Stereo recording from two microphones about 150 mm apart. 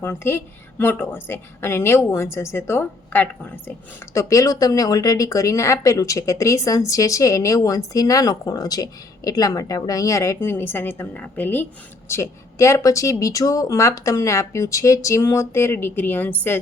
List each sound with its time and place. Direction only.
0.0 s a woman's voice: 15° left (ahead or behind)